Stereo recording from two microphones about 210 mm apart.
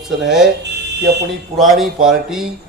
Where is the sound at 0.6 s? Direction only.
55° right (ahead or behind).